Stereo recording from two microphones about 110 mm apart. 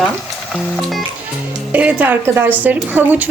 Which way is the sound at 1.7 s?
15° right (ahead or behind).